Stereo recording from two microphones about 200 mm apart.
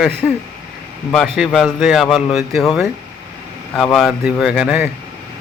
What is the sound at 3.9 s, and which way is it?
Speech, centre (ahead or behind).